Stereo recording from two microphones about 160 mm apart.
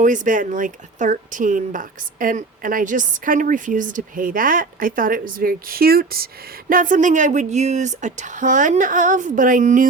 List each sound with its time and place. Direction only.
0.0 s a woman's voice: 55° right (ahead or behind); by 6.2 s 70° right (ahead or behind)
6.7 s speech: 55° right (ahead or behind)